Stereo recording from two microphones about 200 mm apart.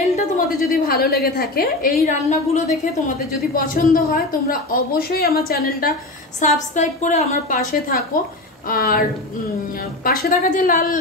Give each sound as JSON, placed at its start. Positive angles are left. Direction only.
{"t": 0.1, "sound": "a woman's voice", "side_deg": 45}
{"t": 6.4, "sound": "a woman's voice", "side_deg": 40}
{"t": 10.0, "sound": "a woman's voice", "side_deg": 45}